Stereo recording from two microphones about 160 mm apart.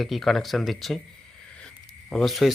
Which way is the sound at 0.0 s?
Centre (ahead or behind).